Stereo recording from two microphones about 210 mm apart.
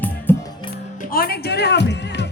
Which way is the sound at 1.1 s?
45° left (ahead or behind).